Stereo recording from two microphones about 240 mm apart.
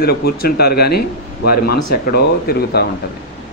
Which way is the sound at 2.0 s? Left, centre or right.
Left.